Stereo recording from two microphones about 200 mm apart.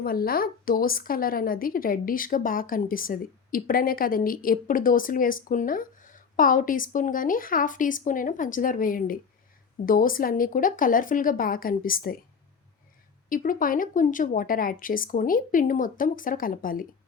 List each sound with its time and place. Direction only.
0.0 s speech: 45° left (ahead or behind)
13.2 s speech: 45° left (ahead or behind)